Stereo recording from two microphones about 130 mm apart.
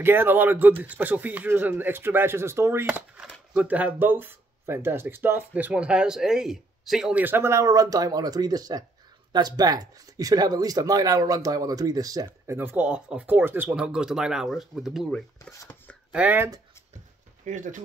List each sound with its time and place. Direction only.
0.0 s speech: 15° right (ahead or behind)
12.3 s speech: 15° right (ahead or behind); by 15.5 s 5° left (ahead or behind)
16.1 s speech: 10° right (ahead or behind)
17.5 s speech: 75° right (ahead or behind)